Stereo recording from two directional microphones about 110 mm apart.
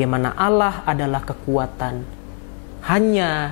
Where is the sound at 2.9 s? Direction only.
15° left (ahead or behind).